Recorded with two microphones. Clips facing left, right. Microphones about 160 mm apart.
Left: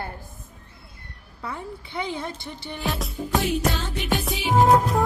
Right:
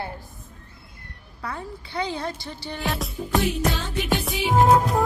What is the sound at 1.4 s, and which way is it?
A woman's voice, 20° left (ahead or behind).